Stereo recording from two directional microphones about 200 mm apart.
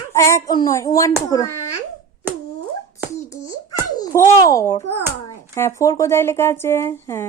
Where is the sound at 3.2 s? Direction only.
20° left (ahead or behind).